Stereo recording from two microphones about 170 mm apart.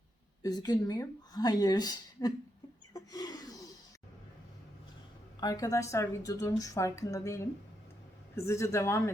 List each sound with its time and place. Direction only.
0.4 s a woman's voice: 25° left (ahead or behind)
2.9 s a sound: 20° left (ahead or behind)
5.4 s a woman's voice: 20° left (ahead or behind)